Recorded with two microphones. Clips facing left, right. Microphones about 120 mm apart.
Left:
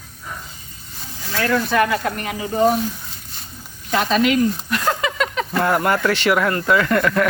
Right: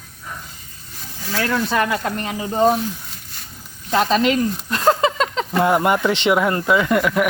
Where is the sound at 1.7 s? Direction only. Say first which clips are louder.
Left 2 dB; 25° right (ahead or behind).